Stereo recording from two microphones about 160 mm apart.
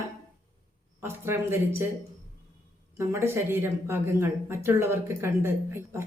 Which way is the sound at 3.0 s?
15° right (ahead or behind).